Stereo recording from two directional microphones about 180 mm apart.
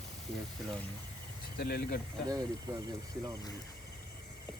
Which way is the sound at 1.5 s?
60° left (ahead or behind).